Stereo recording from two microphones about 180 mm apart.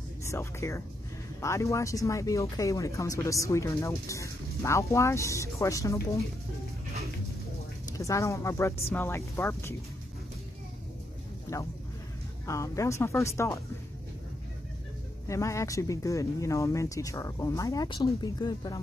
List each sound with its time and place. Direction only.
0.2 s speech: 15° left (ahead or behind)
8.0 s speech: 15° left (ahead or behind)
11.5 s speech: 15° left (ahead or behind)
15.2 s speech: 15° left (ahead or behind)